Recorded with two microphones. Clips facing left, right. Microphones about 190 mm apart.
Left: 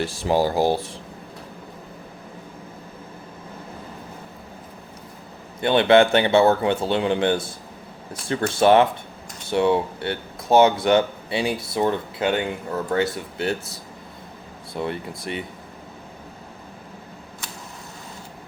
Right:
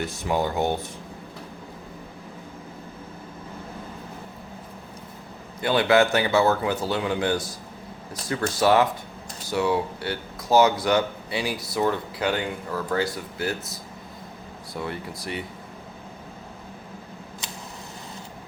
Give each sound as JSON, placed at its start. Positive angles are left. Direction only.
{"t": 0.0, "sound": "speech", "side_deg": 30}
{"t": 5.6, "sound": "speech", "side_deg": 25}
{"t": 14.8, "sound": "speech", "side_deg": 25}